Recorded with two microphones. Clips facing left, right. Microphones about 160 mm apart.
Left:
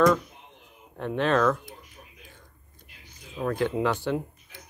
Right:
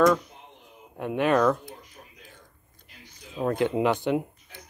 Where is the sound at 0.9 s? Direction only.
15° right (ahead or behind).